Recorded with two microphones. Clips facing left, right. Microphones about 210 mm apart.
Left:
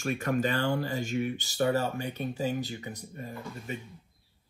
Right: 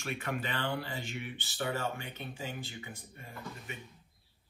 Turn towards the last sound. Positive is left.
turn(degrees=40)  # may be behind; listen again after turning